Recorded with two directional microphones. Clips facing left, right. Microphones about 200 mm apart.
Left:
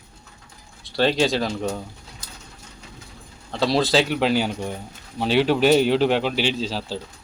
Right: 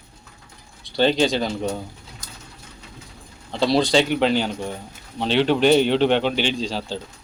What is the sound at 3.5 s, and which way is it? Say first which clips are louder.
Speech: right 1 dB; centre (ahead or behind).